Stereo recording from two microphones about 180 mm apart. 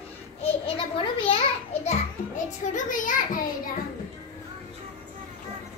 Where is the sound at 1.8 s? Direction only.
40° left (ahead or behind).